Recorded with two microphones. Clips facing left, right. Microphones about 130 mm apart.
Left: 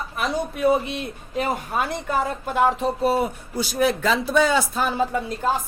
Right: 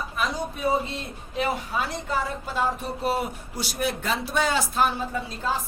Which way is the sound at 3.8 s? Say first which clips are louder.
Left 5 dB; 90° left.